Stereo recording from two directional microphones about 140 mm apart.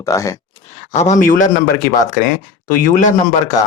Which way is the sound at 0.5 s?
45° left (ahead or behind).